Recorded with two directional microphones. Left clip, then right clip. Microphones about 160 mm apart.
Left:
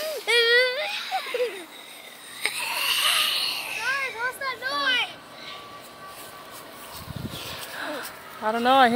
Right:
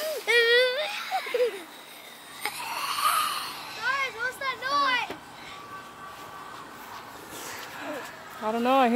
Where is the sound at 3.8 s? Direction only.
5° left (ahead or behind).